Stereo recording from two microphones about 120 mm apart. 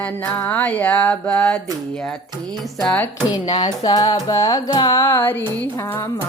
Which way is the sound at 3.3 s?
35° left (ahead or behind).